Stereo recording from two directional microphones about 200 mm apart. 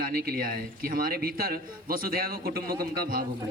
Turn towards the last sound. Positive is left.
turn(degrees=-45)  # may be behind; listen again after turning